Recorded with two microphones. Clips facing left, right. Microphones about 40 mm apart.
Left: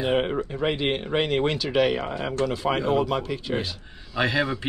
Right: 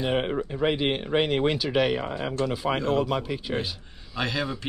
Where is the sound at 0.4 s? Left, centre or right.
Centre.